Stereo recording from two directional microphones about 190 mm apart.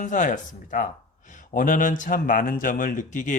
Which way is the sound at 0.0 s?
40° left (ahead or behind).